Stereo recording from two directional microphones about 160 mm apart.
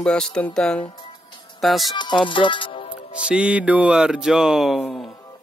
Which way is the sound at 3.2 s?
10° right (ahead or behind).